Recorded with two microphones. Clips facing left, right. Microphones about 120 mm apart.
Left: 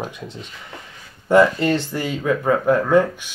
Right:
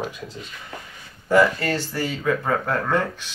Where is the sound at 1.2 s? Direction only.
20° left (ahead or behind).